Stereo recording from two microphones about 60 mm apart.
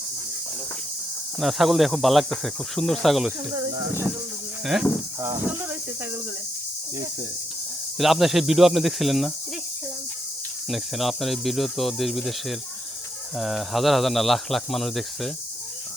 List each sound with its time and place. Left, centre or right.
1.4 s speech: centre
3.1 s speech: centre
4.6 s speech: centre
7.9 s speech: centre
10.7 s speech: centre